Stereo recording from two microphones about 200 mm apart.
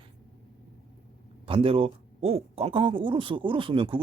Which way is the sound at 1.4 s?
25° right (ahead or behind).